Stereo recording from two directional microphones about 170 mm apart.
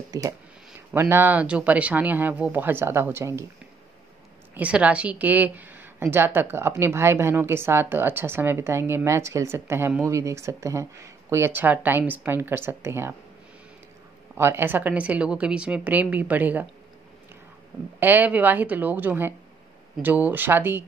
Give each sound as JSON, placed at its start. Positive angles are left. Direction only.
{"t": 0.1, "sound": "a woman's voice", "side_deg": -20}
{"t": 4.6, "sound": "a woman's voice", "side_deg": -10}
{"t": 14.3, "sound": "a woman's voice", "side_deg": -15}
{"t": 17.9, "sound": "a woman's voice", "side_deg": -10}